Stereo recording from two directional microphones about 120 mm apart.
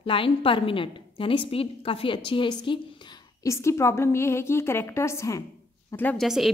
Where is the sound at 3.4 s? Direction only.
25° left (ahead or behind).